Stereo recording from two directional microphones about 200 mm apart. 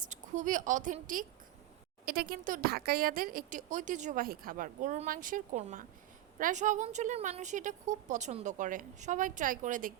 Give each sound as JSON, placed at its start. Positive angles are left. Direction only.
{"t": 0.0, "sound": "a woman's voice", "side_deg": -40}